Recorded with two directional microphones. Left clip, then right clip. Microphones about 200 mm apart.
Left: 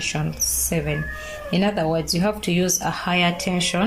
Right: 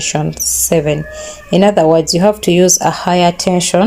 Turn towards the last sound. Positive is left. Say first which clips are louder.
# right 11 dB
turn(degrees=-40)  # may be behind; listen again after turning